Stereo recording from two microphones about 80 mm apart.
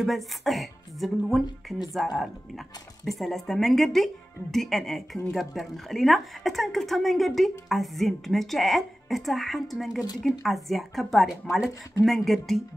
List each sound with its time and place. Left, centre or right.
0.0 s a woman's voice: centre
3.1 s a woman's voice: centre